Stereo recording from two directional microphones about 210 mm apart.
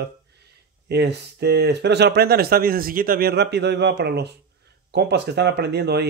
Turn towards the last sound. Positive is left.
turn(degrees=-50)  # may be behind; listen again after turning